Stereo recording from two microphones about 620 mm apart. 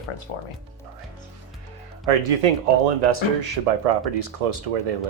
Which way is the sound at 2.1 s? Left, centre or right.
Right.